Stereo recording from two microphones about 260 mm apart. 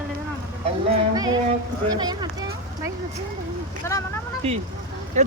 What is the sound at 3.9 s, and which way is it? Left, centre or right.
Speech, centre.